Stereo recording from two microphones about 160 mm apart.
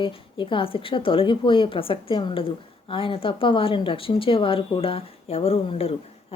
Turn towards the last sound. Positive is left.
turn(degrees=40)  # may be behind; listen again after turning